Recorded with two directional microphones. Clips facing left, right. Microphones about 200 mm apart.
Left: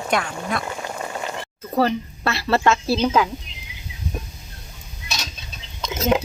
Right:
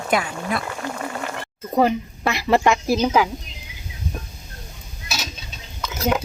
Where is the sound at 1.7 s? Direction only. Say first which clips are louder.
Right 2 dB; 15° right (ahead or behind).